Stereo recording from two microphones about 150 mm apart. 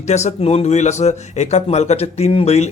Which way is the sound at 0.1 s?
50° left (ahead or behind).